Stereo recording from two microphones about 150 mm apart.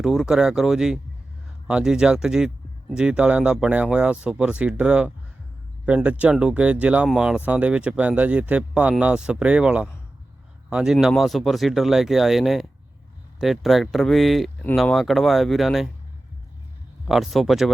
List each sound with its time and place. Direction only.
0.0 s speech: centre (ahead or behind)
17.1 s speech: centre (ahead or behind)